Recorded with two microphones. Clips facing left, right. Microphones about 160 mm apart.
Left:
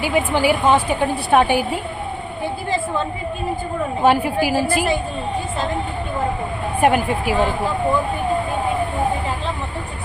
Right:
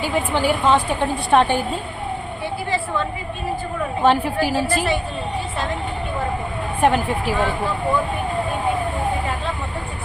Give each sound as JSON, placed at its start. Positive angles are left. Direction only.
{"t": 0.0, "sound": "a woman's voice", "side_deg": 10}
{"t": 4.0, "sound": "a woman's voice", "side_deg": 10}
{"t": 6.8, "sound": "a woman's voice", "side_deg": 10}